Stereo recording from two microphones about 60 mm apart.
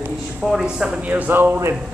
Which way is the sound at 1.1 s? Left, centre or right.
Right.